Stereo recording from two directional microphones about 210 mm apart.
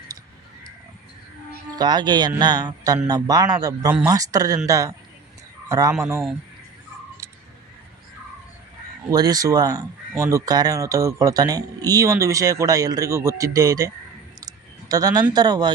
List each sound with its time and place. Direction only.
1.7 s a man's voice: 20° right (ahead or behind)
9.0 s speech: 20° right (ahead or behind)
14.4 s a sound: 20° right (ahead or behind)
15.3 s speech: 20° right (ahead or behind)